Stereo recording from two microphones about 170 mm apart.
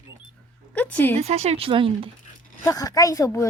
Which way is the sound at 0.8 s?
10° left (ahead or behind).